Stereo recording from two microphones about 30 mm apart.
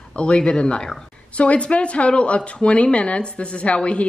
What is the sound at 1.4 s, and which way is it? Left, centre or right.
Speech, left.